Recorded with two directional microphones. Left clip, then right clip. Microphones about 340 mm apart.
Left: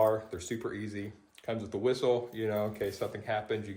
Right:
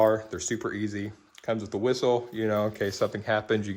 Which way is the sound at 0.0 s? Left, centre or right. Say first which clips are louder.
Right 5 dB; right.